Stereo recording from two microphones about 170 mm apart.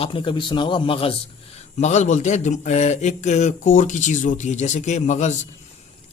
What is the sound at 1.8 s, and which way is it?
Speech, 40° left (ahead or behind).